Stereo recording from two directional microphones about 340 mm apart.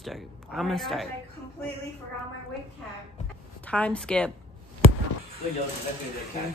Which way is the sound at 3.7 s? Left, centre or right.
Centre.